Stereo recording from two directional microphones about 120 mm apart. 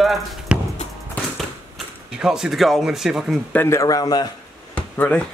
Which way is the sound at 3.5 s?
25° left (ahead or behind).